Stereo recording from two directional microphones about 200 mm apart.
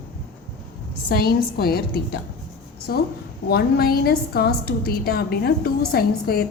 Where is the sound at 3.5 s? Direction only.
50° left (ahead or behind).